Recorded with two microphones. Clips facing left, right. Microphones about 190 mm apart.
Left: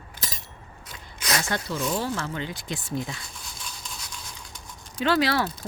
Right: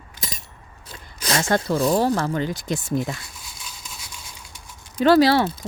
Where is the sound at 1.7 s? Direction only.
35° right (ahead or behind).